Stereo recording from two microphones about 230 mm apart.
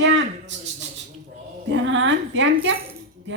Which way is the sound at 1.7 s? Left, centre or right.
Right.